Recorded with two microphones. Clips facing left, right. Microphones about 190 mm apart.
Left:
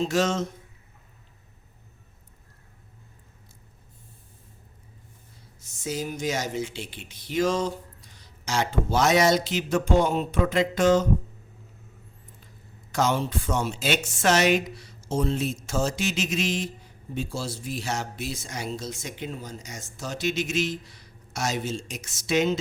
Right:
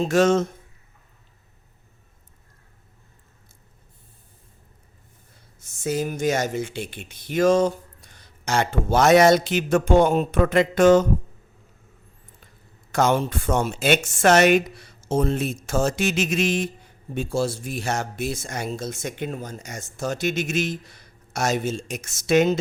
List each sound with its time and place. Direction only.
0.0 s speech: 55° right (ahead or behind)
5.8 s speech: 55° right (ahead or behind)
12.9 s speech: 55° right (ahead or behind)